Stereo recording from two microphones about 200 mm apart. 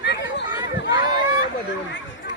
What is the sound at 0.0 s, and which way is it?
Chatter, 60° left (ahead or behind).